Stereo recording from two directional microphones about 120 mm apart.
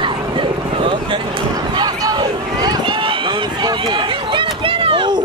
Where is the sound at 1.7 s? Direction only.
35° right (ahead or behind).